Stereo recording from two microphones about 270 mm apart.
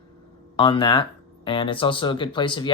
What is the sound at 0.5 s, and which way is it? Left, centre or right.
Speech, centre.